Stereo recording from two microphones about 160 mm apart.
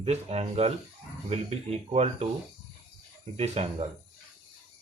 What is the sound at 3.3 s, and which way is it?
Speech, 40° right (ahead or behind).